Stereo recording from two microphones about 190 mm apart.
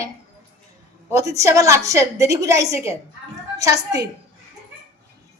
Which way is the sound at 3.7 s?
60° right (ahead or behind).